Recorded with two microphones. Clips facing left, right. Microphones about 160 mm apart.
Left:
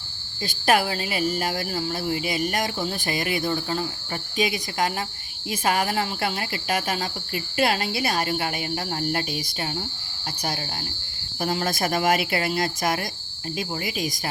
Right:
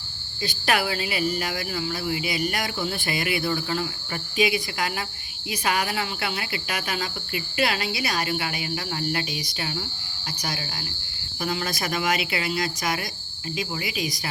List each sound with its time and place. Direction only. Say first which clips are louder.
0.4 s speech: left 3 dB; 45° left (ahead or behind)
3.5 s cricket: even; 30° left (ahead or behind)
5.5 s speech: left 2 dB; 45° left (ahead or behind)
11.3 s speech: left 3 dB; 45° left (ahead or behind)